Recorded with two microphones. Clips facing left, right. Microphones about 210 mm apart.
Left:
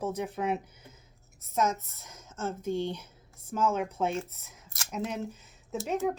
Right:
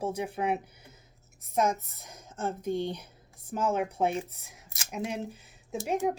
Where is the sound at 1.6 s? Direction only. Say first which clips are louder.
Right 1 dB; 15° right (ahead or behind).